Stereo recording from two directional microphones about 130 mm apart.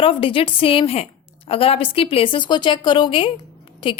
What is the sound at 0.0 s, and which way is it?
A woman's voice, 40° left (ahead or behind).